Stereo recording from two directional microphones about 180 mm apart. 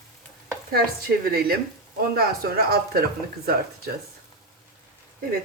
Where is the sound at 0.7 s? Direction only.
60° right (ahead or behind).